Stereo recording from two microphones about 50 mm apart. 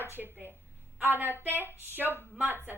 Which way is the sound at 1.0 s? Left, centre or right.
Right.